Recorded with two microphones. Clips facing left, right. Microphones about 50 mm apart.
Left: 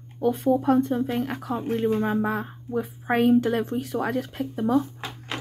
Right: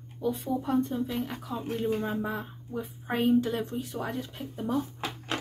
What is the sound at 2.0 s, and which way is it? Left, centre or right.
Speech, left.